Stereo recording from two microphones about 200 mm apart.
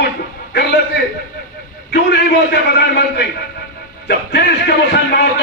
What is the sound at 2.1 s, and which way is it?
A man's voice, 50° left (ahead or behind).